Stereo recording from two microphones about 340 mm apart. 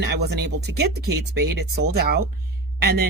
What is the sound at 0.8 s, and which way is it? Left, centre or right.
Speech, right.